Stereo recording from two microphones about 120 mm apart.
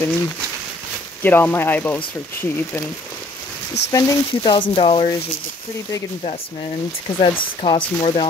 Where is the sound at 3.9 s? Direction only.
30° left (ahead or behind).